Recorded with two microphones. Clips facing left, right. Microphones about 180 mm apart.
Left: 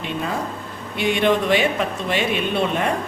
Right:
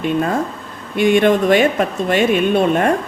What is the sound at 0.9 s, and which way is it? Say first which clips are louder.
Speech: right 6 dB; 50° right (ahead or behind).